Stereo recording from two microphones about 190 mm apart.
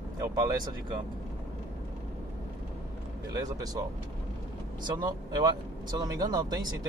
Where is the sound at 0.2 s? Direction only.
15° right (ahead or behind).